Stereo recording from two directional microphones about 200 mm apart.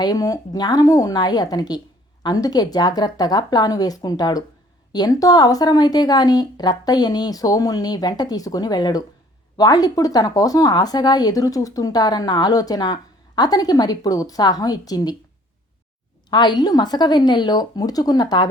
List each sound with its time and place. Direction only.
0.0 s speech: 15° left (ahead or behind)
16.3 s speech: 20° left (ahead or behind)